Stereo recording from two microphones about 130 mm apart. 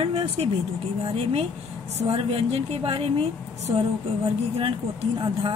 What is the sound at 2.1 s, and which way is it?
A woman's voice, 45° right (ahead or behind).